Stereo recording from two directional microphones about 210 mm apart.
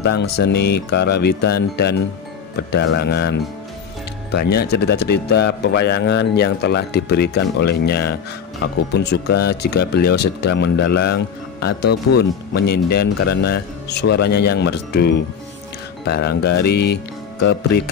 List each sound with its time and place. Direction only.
0.0 s speech: 55° left (ahead or behind)